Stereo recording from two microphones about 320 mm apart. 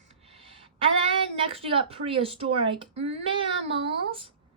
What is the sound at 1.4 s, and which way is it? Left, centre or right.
Speech, centre.